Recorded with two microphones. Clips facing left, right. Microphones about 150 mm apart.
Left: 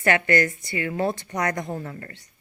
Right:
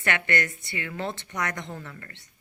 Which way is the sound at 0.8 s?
35° left (ahead or behind).